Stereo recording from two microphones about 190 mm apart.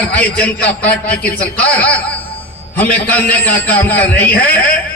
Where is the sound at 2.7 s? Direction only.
10° left (ahead or behind).